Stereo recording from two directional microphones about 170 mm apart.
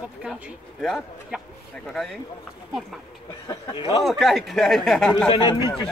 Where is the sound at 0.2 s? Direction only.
5° right (ahead or behind).